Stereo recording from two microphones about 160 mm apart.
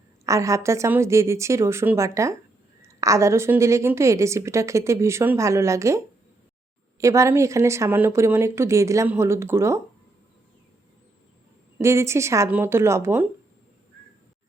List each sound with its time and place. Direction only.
0.3 s a woman's voice: 20° right (ahead or behind)
7.0 s a woman's voice: 20° right (ahead or behind)
11.8 s a woman's voice: 20° right (ahead or behind)